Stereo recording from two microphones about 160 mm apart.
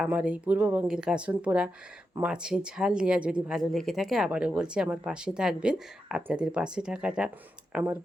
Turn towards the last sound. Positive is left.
turn(degrees=-10)  # may be behind; listen again after turning